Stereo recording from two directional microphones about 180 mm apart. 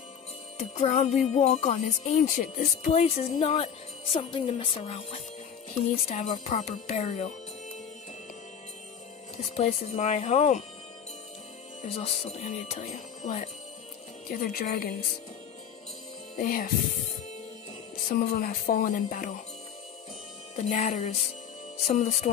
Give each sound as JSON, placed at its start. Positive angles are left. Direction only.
{"t": 0.6, "sound": "speech", "side_deg": 40}
{"t": 9.4, "sound": "speech", "side_deg": 35}
{"t": 11.8, "sound": "speech", "side_deg": 35}
{"t": 14.3, "sound": "speech", "side_deg": 55}
{"t": 16.3, "sound": "speech", "side_deg": 50}
{"t": 18.1, "sound": "speech", "side_deg": 55}
{"t": 20.5, "sound": "speech", "side_deg": 40}